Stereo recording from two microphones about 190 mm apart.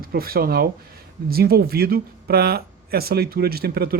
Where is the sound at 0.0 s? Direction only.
50° right (ahead or behind).